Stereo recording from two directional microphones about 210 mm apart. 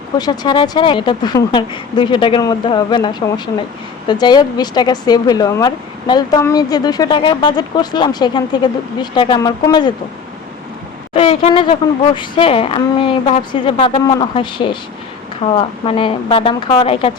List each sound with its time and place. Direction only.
0.2 s speech: 20° left (ahead or behind)
11.1 s speech: 25° left (ahead or behind)